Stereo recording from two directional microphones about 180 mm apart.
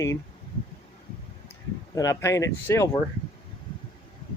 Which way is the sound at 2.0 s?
15° left (ahead or behind).